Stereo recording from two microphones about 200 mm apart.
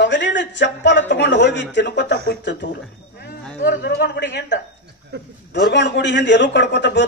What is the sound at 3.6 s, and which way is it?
Speech, 55° left (ahead or behind).